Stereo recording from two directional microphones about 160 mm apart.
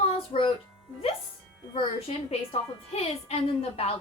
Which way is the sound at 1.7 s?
35° left (ahead or behind).